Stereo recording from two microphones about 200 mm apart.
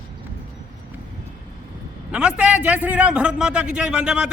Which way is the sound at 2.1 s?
5° right (ahead or behind).